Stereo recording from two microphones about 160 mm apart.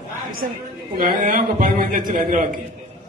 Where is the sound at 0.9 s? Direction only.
60° right (ahead or behind).